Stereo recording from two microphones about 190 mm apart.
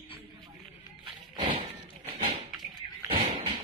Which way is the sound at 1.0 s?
25° right (ahead or behind).